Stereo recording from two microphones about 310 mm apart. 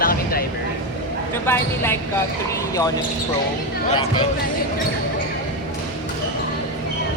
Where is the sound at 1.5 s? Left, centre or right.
Centre.